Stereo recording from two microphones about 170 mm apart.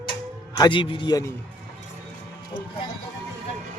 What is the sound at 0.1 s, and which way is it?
Music, 25° left (ahead or behind).